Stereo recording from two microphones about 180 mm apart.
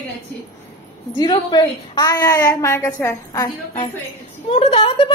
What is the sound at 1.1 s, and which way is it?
A woman's voice, 25° left (ahead or behind).